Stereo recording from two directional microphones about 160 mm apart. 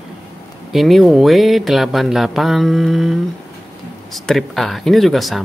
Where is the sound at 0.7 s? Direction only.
Centre (ahead or behind).